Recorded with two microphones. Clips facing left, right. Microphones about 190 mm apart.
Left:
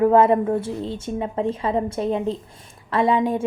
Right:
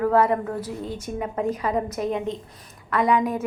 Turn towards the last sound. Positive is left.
turn(degrees=25)  # may be behind; listen again after turning